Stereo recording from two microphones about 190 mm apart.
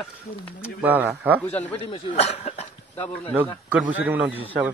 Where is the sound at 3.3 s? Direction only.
5° right (ahead or behind).